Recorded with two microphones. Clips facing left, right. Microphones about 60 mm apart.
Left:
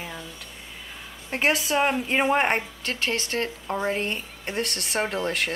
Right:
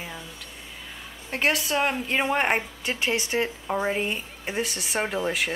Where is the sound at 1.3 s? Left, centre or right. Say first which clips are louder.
Left 1 dB; centre.